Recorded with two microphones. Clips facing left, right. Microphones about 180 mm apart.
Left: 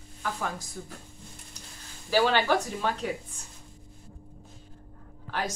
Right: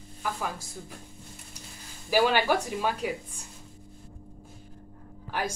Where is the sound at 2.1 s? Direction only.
10° right (ahead or behind).